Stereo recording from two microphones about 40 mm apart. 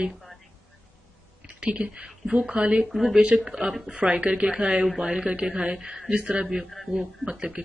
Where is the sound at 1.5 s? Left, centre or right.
Right.